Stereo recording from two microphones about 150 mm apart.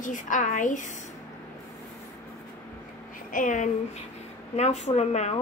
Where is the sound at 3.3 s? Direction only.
60° left (ahead or behind).